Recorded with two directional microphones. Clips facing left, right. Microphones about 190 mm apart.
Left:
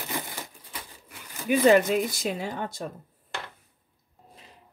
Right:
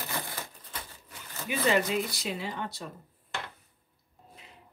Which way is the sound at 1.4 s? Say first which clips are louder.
Left 8 dB; 50° left (ahead or behind).